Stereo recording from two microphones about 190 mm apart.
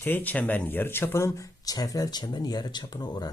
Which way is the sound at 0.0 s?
10° left (ahead or behind).